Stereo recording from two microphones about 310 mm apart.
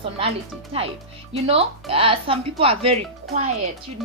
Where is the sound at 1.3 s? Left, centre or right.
Centre.